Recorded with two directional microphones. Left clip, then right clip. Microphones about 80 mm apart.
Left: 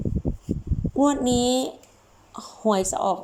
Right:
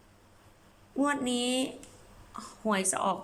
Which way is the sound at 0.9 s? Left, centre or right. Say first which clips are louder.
Left 8 dB; left.